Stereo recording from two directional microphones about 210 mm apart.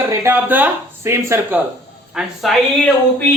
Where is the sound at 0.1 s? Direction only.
10° right (ahead or behind).